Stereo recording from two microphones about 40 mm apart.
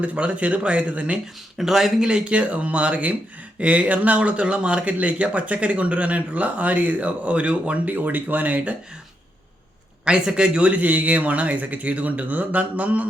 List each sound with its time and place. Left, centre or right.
0.0 s a man's voice: right
1.5 s speech: centre
2.0 s a man's voice: right
10.1 s a man's voice: right
10.7 s a man's voice: right